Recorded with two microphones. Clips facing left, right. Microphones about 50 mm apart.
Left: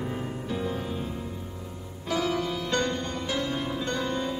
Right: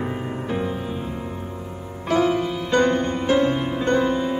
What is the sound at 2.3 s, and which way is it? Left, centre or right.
Music, right.